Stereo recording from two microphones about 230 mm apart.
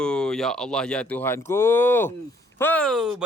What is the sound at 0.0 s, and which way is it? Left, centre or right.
Speech, centre.